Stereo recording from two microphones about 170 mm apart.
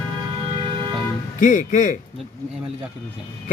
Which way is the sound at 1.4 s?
45° left (ahead or behind).